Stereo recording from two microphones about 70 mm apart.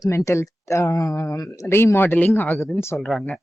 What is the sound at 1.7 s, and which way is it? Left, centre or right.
Speech, left.